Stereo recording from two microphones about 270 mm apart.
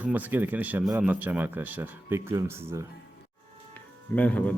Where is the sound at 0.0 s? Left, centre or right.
Centre.